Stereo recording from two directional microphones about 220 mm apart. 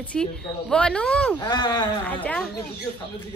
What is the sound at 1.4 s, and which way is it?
Speech, 20° left (ahead or behind).